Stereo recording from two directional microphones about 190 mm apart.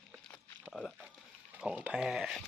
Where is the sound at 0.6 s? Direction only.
Centre (ahead or behind).